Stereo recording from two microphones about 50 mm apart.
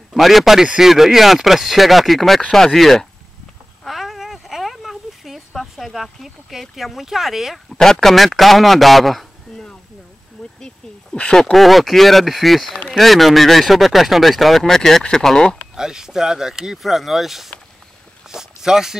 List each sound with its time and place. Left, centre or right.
0.1 s speech: centre
3.8 s a sound: centre
7.8 s speech: centre
11.1 s speech: centre
11.5 s speech: centre
15.7 s speech: centre